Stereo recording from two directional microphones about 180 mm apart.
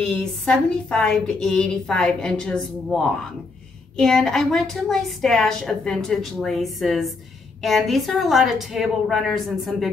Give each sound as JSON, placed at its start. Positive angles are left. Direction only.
{"t": 0.0, "sound": "a woman's voice", "side_deg": 5}